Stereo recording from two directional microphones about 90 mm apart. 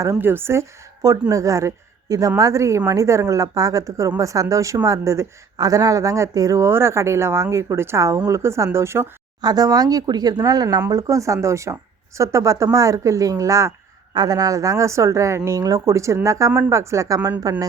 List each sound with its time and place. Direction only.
0.0 s a woman's voice: 30° right (ahead or behind)
9.4 s speech: 45° right (ahead or behind)
14.1 s speech: 45° right (ahead or behind)